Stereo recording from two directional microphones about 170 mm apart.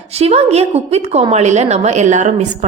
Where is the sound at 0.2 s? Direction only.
40° right (ahead or behind).